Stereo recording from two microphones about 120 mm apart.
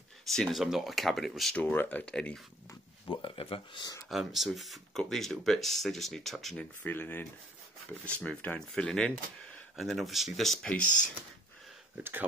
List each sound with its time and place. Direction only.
0.3 s speech: centre (ahead or behind)
1.6 s speech: 15° left (ahead or behind)
3.1 s speech: 45° left (ahead or behind)
4.1 s speech: centre (ahead or behind)
12.0 s speech: 20° right (ahead or behind)